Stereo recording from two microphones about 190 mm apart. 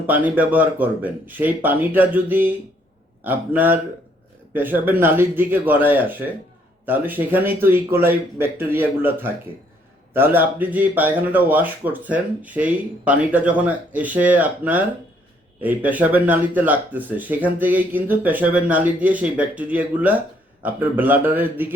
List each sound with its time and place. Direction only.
0.1 s speech: 10° right (ahead or behind)